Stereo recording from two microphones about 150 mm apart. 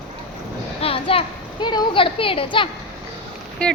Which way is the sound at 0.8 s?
40° left (ahead or behind).